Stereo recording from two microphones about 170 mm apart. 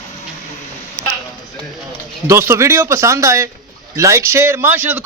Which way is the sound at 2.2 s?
15° right (ahead or behind).